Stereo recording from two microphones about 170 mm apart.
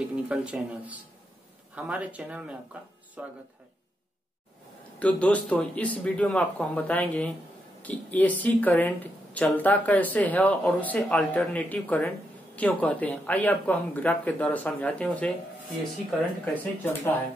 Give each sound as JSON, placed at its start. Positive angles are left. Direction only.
{"t": 0.1, "sound": "speech", "side_deg": -5}
{"t": 4.9, "sound": "speech", "side_deg": 10}
{"t": 16.8, "sound": "speech", "side_deg": 10}